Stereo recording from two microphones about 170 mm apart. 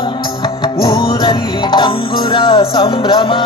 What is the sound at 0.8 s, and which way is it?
Music, 30° left (ahead or behind).